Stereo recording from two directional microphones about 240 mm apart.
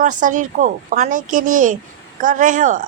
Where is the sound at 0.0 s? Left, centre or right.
Right.